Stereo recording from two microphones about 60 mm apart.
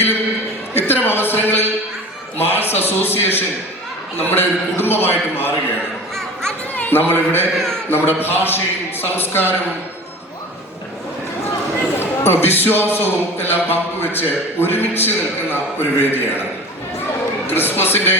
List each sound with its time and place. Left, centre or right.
0.7 s a sound: left
4.2 s a man's voice: left
6.7 s a man's voice: left
11.9 s a man's voice: left
17.4 s a man's voice: left